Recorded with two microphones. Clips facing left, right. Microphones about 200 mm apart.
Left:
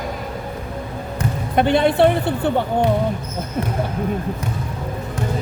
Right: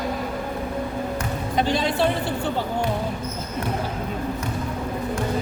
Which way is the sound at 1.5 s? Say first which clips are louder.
Left 7 dB; 60° left (ahead or behind).